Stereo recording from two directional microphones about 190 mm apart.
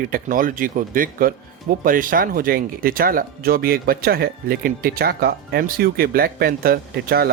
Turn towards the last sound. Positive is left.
turn(degrees=-55)  # may be behind; listen again after turning